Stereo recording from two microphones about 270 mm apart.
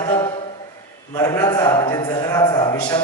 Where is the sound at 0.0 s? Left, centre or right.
Centre.